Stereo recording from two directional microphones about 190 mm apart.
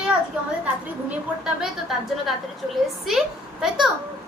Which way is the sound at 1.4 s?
Centre (ahead or behind).